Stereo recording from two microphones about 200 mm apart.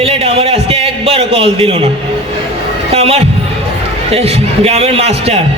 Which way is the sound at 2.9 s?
30° right (ahead or behind).